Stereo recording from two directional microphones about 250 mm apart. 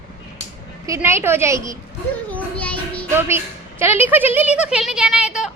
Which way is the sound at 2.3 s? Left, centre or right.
Centre.